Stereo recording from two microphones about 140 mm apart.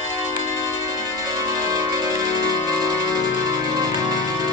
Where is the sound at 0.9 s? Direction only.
25° right (ahead or behind).